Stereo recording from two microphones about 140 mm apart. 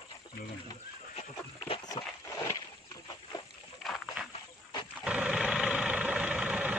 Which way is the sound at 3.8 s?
Centre (ahead or behind).